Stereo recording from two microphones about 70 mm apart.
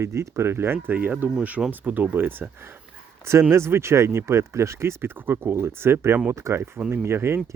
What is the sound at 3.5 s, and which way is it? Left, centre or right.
Speech, right.